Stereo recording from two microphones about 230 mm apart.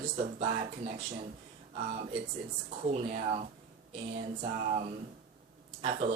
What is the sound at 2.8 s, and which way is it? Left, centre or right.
Speech, right.